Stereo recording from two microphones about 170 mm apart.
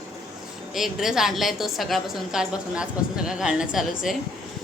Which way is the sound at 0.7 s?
Centre (ahead or behind).